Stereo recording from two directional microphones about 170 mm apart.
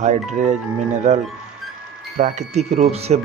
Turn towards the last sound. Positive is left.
turn(degrees=-40)  # may be behind; listen again after turning